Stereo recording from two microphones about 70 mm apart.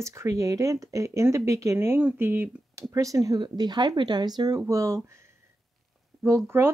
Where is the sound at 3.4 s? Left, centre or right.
Right.